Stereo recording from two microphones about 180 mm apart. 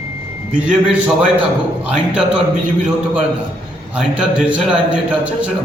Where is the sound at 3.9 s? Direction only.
5° right (ahead or behind).